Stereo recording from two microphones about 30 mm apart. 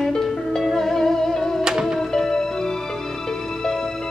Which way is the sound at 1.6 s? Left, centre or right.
Right.